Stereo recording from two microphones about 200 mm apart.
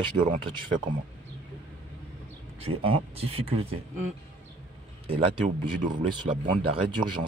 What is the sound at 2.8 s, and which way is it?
Speech, 30° right (ahead or behind).